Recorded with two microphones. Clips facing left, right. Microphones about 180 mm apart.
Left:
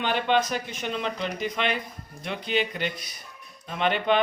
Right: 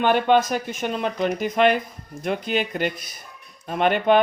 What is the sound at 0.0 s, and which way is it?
Speech, 50° right (ahead or behind).